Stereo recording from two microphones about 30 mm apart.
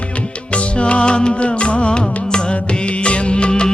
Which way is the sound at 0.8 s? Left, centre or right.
Left.